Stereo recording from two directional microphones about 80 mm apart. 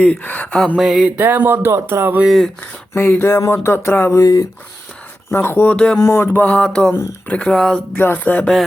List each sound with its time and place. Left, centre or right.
0.0 s music: centre
0.8 s speech: centre
1.0 s a sound: right
2.2 s speech: centre
2.9 s speech: left
4.1 s speech: left
5.3 s music: left
5.7 s a sound: centre
6.0 s speech: left
6.3 s a sound: centre
7.9 s music: left